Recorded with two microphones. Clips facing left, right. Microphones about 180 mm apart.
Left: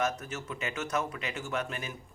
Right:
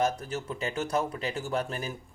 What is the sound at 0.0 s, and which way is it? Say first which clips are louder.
Speech: right 4 dB; 30° right (ahead or behind).